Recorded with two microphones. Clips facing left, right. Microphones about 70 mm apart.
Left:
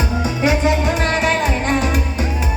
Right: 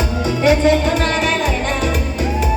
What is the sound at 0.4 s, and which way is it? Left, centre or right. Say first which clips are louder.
Music: right 4 dB; centre.